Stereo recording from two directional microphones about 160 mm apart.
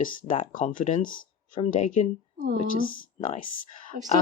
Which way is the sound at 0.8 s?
50° left (ahead or behind).